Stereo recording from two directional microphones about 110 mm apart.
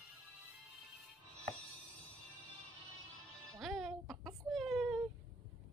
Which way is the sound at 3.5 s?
Centre (ahead or behind).